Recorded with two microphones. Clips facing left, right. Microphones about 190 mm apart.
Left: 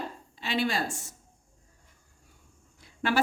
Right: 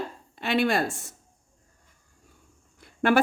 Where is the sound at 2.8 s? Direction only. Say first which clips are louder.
Right 7 dB; 55° right (ahead or behind).